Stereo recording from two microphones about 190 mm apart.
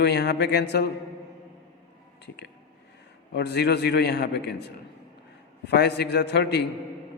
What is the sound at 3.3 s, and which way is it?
A man's voice, 60° left (ahead or behind).